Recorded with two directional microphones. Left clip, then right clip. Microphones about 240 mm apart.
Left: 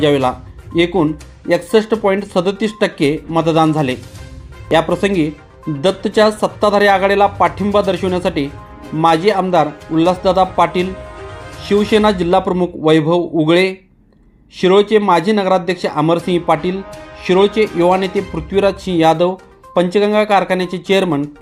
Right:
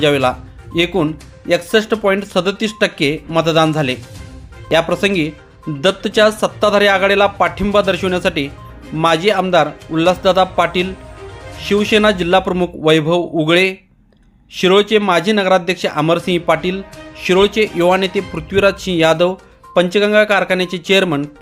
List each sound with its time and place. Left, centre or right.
0.0 s speech: centre